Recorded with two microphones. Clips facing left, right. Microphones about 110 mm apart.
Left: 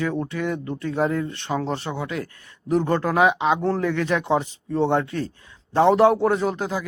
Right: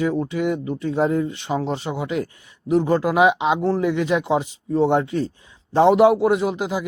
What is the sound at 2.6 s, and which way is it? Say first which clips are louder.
Speech: right 3 dB; 10° right (ahead or behind).